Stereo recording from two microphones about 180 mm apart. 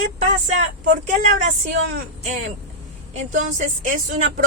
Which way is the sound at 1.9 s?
45° right (ahead or behind).